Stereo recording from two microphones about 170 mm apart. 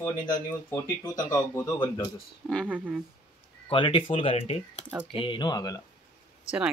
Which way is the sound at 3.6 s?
30° left (ahead or behind).